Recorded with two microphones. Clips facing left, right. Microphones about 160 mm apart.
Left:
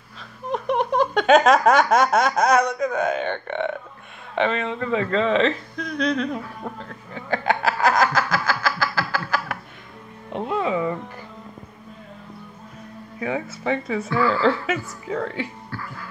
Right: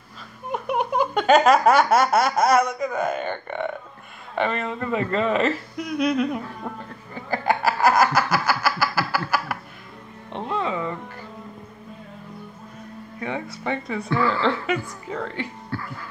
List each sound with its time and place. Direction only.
0.5 s a sound: 10° right (ahead or behind)
4.4 s speech: 5° right (ahead or behind)
7.6 s snicker: 5° right (ahead or behind)
10.3 s music: 5° left (ahead or behind)
10.7 s music: 20° left (ahead or behind)
13.2 s speech: 5° left (ahead or behind)